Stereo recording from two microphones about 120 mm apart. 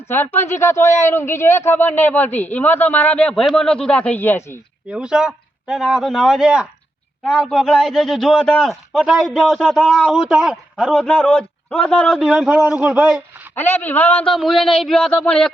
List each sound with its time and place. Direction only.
0.1 s a man's voice: 20° left (ahead or behind)
4.9 s a man's voice: 10° right (ahead or behind)
10.9 s a man's voice: 10° left (ahead or behind)
12.3 s a man's voice: 10° right (ahead or behind)
13.6 s a man's voice: 15° left (ahead or behind)
14.3 s a man's voice: centre (ahead or behind)